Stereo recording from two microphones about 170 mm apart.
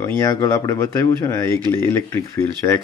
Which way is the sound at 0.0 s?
20° left (ahead or behind).